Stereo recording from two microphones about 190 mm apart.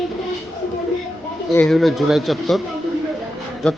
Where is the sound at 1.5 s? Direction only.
5° left (ahead or behind).